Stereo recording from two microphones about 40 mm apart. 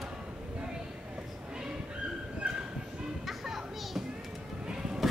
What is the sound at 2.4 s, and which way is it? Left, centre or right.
Bow-wow, right.